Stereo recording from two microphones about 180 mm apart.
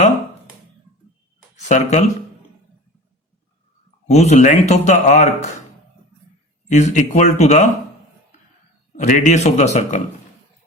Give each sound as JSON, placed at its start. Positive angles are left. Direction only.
{"t": 1.5, "sound": "speech", "side_deg": 40}
{"t": 4.0, "sound": "speech", "side_deg": 40}
{"t": 6.7, "sound": "speech", "side_deg": 40}
{"t": 9.0, "sound": "speech", "side_deg": 45}